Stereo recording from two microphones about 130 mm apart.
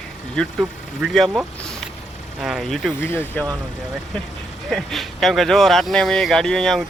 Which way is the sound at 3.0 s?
15° left (ahead or behind).